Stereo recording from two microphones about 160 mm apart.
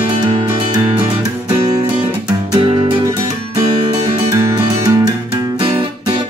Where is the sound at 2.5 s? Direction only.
25° right (ahead or behind).